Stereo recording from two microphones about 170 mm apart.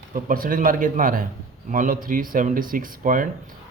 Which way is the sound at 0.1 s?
55° right (ahead or behind).